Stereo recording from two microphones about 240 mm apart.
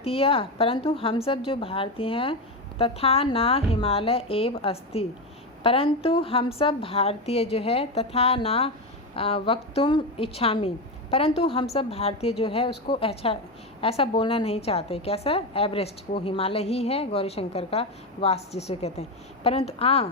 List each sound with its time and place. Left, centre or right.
0.0 s a woman's voice: left